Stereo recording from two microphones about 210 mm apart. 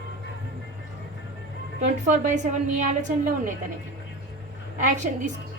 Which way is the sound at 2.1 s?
35° right (ahead or behind).